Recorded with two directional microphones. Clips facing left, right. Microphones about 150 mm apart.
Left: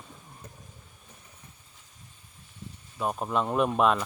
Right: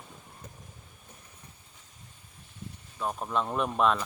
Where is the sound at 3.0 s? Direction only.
15° left (ahead or behind).